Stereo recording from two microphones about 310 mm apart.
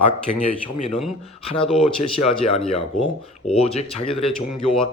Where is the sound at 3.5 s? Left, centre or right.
Centre.